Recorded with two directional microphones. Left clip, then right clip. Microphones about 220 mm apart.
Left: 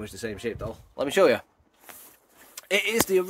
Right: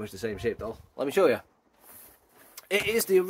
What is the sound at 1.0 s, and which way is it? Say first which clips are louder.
Speech: left 3 dB; 30° left (ahead or behind).